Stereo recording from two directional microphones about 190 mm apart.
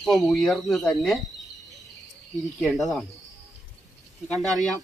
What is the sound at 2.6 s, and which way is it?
Speech, centre (ahead or behind).